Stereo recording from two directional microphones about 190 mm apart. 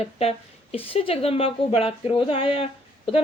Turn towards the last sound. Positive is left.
turn(degrees=30)  # may be behind; listen again after turning